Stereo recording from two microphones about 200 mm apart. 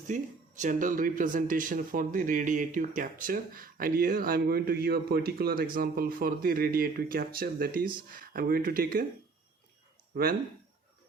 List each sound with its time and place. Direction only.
0.1 s speech: 40° right (ahead or behind)